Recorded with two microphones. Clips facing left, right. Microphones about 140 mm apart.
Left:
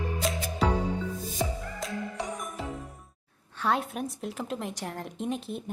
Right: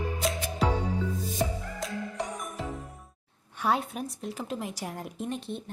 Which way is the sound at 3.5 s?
10° right (ahead or behind).